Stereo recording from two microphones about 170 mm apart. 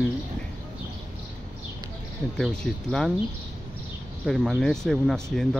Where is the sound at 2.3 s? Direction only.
5° left (ahead or behind).